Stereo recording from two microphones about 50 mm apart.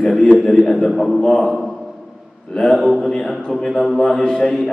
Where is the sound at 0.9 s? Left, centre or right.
Centre.